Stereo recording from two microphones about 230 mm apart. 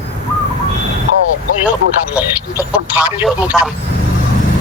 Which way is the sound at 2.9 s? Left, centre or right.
Centre.